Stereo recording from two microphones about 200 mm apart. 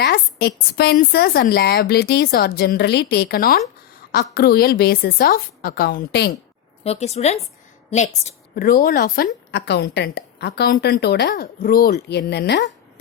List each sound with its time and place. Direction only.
0.0 s a woman's voice: 50° left (ahead or behind)
6.8 s speech: 30° left (ahead or behind)
8.5 s a woman's voice: 45° left (ahead or behind)